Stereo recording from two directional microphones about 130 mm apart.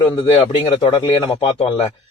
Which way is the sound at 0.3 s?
40° left (ahead or behind).